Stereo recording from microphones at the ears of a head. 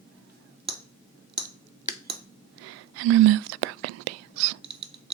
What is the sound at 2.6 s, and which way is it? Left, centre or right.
Whispering, right.